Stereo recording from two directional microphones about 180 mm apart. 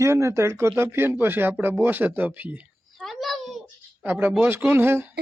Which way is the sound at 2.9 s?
Centre (ahead or behind).